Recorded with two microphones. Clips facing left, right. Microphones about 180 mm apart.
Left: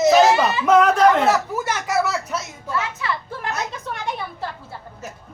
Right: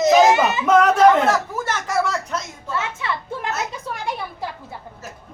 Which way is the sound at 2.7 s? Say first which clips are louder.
Even; 25° right (ahead or behind).